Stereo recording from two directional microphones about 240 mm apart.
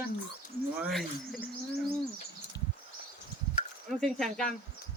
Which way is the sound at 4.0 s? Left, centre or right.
Centre.